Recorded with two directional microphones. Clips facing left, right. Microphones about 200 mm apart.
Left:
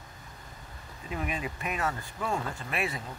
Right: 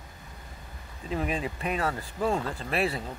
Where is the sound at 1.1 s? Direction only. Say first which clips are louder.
Right 4 dB; 35° right (ahead or behind).